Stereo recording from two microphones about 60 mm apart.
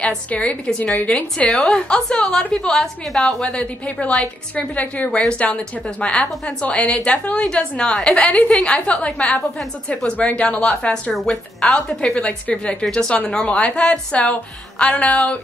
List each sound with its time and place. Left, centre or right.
0.3 s a woman's voice: left
1.5 s a woman's voice: centre
8.2 s a woman's voice: left
8.9 s a woman's voice: centre
9.8 s a woman's voice: left